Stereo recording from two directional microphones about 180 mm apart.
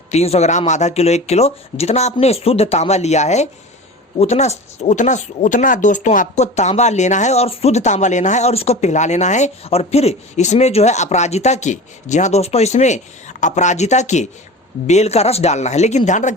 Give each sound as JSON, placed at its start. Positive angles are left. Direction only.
{"t": 0.1, "sound": "speech", "side_deg": 35}